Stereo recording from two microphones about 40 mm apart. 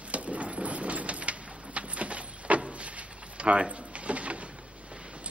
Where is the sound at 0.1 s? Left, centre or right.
Right.